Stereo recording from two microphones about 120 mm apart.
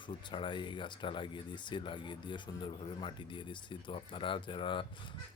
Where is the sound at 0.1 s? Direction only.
45° left (ahead or behind).